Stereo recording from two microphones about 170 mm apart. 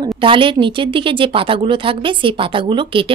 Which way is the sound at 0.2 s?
30° right (ahead or behind).